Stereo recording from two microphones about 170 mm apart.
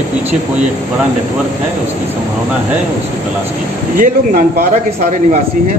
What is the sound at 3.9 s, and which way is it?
Speech, 55° right (ahead or behind).